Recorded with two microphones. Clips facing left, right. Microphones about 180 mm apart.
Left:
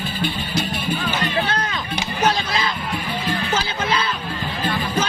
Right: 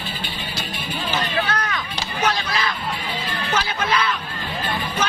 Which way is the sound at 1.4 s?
25° left (ahead or behind).